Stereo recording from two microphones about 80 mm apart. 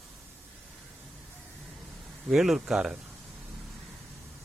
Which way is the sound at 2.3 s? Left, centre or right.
Centre.